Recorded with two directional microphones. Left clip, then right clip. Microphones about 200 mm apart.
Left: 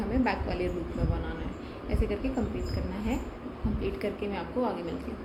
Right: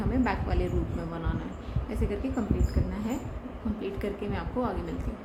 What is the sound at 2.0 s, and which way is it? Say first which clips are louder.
Speech: left 1 dB; 30° right (ahead or behind).